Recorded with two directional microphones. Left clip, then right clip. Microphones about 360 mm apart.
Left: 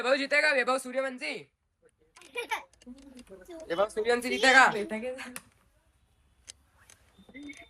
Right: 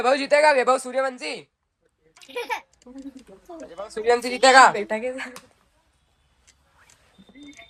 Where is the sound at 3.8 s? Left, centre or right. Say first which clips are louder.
Right 12 dB; centre.